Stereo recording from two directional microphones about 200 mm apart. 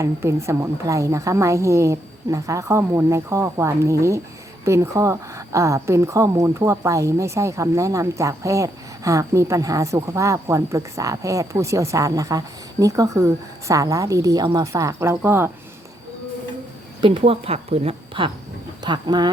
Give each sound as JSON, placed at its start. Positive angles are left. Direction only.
{"t": 0.0, "sound": "a woman's voice", "side_deg": -15}
{"t": 17.0, "sound": "a woman's voice", "side_deg": -25}